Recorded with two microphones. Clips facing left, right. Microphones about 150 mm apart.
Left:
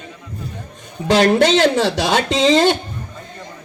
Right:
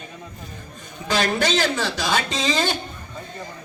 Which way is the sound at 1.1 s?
80° left.